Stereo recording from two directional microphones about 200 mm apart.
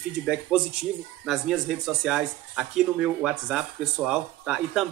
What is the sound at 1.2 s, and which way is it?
Speech, centre (ahead or behind).